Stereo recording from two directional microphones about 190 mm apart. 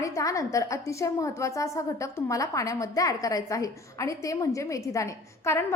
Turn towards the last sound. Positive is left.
turn(degrees=15)  # may be behind; listen again after turning